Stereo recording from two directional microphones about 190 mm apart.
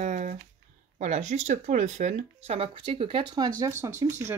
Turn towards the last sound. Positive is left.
turn(degrees=-20)  # may be behind; listen again after turning